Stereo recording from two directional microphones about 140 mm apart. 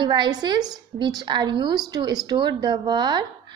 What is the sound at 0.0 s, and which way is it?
A woman's voice, 35° right (ahead or behind).